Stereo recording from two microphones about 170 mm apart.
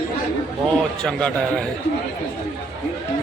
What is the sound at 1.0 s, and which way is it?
Speech, 5° left (ahead or behind).